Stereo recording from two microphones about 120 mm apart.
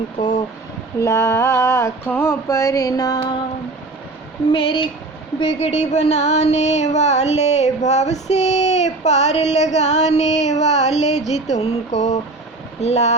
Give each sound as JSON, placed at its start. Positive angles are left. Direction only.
{"t": 0.9, "sound": "a sound", "side_deg": 25}
{"t": 2.5, "sound": "music", "side_deg": 25}
{"t": 4.4, "sound": "a woman's voice", "side_deg": 50}
{"t": 5.5, "sound": "music", "side_deg": 65}